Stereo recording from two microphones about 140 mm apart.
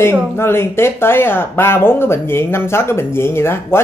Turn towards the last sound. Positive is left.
turn(degrees=15)  # may be behind; listen again after turning